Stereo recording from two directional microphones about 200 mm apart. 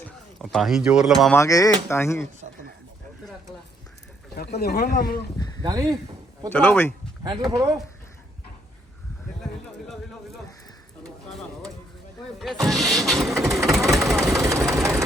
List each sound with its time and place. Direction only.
0.3 s speech: centre (ahead or behind)
1.4 s speech: 15° left (ahead or behind)
4.4 s speech: 50° left (ahead or behind)
5.6 s speech: 20° right (ahead or behind)
6.5 s speech: 10° left (ahead or behind)
7.5 s speech: 20° right (ahead or behind)
11.0 s bird: centre (ahead or behind)
12.4 s speech: centre (ahead or behind)
13.3 s vehicle: 15° right (ahead or behind)
14.3 s engine: 15° right (ahead or behind)